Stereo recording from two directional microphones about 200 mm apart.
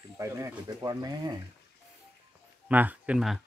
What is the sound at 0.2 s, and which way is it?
Speech, 15° right (ahead or behind).